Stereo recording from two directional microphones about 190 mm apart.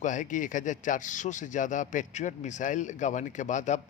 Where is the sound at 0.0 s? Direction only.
40° left (ahead or behind).